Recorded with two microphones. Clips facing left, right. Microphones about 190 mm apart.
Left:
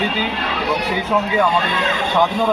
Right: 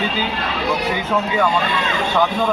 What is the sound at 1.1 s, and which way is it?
Speech, 10° left (ahead or behind).